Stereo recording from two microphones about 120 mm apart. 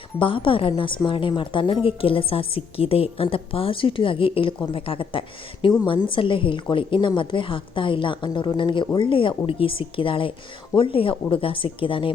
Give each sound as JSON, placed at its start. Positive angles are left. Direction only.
{"t": 0.2, "sound": "a woman's voice", "side_deg": 45}